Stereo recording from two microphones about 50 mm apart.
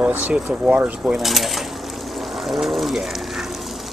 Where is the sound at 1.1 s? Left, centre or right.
Centre.